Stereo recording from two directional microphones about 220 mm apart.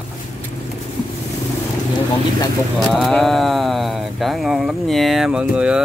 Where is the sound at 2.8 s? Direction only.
Centre (ahead or behind).